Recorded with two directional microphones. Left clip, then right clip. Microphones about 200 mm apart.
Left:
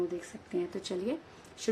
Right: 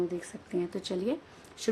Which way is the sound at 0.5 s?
20° right (ahead or behind).